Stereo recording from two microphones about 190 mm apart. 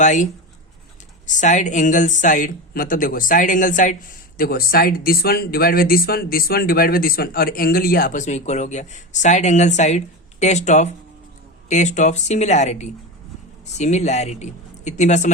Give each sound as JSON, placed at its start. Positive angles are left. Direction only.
{"t": 0.0, "sound": "speech", "side_deg": 40}
{"t": 1.3, "sound": "speech", "side_deg": 40}